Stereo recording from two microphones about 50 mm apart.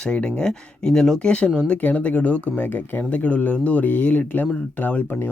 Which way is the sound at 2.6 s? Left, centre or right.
Left.